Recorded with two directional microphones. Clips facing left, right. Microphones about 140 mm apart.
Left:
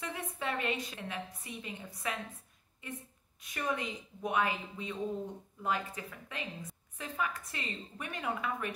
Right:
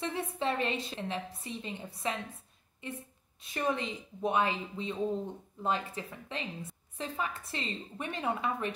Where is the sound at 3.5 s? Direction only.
30° right (ahead or behind).